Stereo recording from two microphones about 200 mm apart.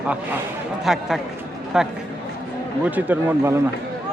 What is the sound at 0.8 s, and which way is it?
Speech, centre (ahead or behind).